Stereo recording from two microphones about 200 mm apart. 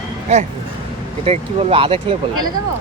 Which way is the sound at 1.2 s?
30° right (ahead or behind).